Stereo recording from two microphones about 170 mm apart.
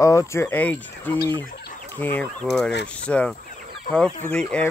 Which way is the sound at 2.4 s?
Centre (ahead or behind).